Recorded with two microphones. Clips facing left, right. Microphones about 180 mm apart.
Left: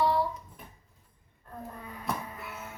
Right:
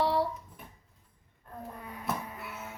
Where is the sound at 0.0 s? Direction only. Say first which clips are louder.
Left 1 dB; 70° right (ahead or behind).